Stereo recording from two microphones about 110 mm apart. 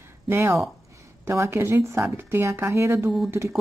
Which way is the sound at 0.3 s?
25° right (ahead or behind).